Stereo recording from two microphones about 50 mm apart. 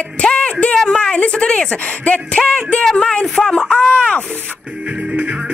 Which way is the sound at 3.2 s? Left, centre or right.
Centre.